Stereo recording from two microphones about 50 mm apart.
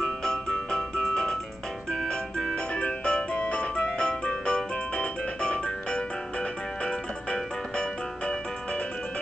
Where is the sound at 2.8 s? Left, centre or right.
Left.